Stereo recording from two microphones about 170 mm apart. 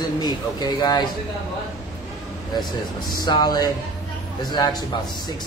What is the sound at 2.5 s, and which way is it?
A man's voice, 25° left (ahead or behind).